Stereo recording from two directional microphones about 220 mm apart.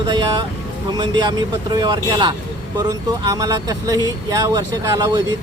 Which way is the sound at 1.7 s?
20° right (ahead or behind).